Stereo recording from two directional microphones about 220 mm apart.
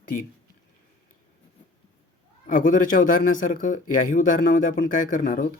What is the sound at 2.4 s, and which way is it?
A man's voice, 35° left (ahead or behind).